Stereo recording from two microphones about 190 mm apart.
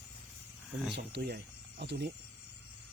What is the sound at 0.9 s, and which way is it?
Speech, 65° right (ahead or behind).